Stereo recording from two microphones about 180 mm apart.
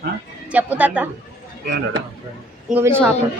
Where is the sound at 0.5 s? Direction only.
10° right (ahead or behind).